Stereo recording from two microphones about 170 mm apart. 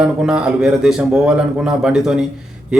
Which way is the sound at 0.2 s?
5° right (ahead or behind).